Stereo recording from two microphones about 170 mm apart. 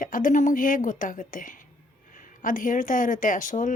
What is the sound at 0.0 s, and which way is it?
Speech, 50° left (ahead or behind).